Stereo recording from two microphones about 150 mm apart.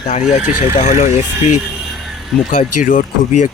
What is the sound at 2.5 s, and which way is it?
Speech, 60° left (ahead or behind).